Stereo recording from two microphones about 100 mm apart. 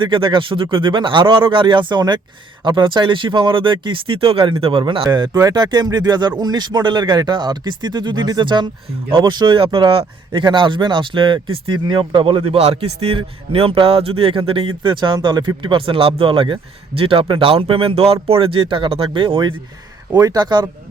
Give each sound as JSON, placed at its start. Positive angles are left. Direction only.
{"t": 0.0, "sound": "speech", "side_deg": -55}
{"t": 4.8, "sound": "speech", "side_deg": -50}